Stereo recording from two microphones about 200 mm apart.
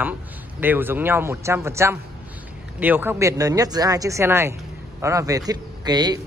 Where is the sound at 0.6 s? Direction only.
10° right (ahead or behind).